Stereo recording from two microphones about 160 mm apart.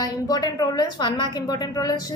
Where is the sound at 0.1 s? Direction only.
25° left (ahead or behind).